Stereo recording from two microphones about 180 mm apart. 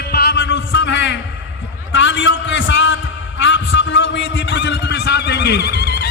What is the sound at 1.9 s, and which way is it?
A man's voice, 90° left.